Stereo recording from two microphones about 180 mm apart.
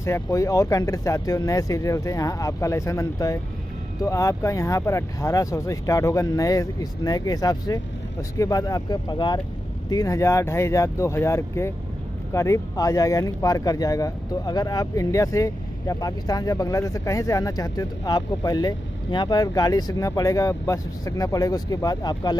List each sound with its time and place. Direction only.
0.0 s speech: 15° left (ahead or behind)